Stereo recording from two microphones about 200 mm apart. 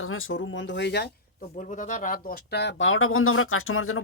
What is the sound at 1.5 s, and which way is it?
Speech, 40° left (ahead or behind).